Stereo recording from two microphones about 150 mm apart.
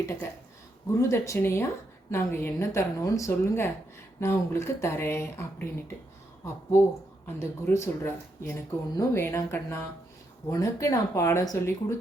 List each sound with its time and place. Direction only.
0.0 s a woman's voice: 15° left (ahead or behind)